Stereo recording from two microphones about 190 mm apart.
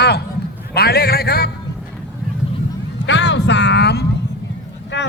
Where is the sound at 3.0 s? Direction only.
65° left (ahead or behind).